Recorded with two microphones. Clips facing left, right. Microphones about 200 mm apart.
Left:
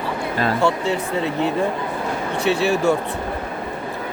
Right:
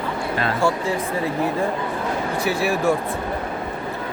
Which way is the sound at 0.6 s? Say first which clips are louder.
Left 1 dB; 65° left (ahead or behind).